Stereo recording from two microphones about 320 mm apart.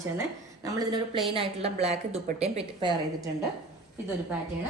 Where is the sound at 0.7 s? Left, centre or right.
Centre.